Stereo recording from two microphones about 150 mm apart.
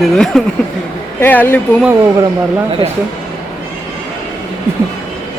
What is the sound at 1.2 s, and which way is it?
Speech, 15° left (ahead or behind).